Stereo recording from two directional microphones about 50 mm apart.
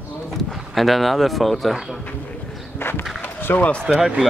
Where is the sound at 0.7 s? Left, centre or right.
Centre.